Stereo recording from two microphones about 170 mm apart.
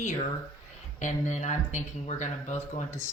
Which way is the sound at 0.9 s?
45° left (ahead or behind).